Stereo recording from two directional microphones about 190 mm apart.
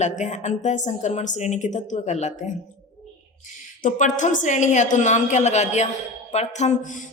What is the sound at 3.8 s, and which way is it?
Music, 40° left (ahead or behind).